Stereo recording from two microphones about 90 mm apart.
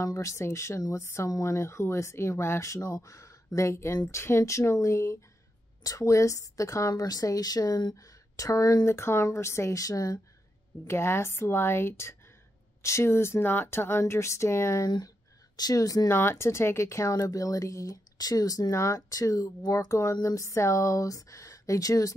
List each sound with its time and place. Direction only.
0.0 s speech: 35° left (ahead or behind)
8.8 s speech: 30° left (ahead or behind)
10.9 s speech: 30° left (ahead or behind)
15.5 s speech: 45° left (ahead or behind)
16.1 s speech: 30° left (ahead or behind)